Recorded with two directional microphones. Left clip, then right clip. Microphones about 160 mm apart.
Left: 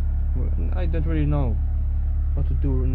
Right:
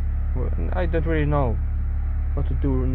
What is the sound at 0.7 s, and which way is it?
Speech, 15° right (ahead or behind).